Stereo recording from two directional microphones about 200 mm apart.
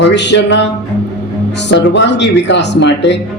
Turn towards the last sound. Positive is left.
turn(degrees=60)  # may be behind; listen again after turning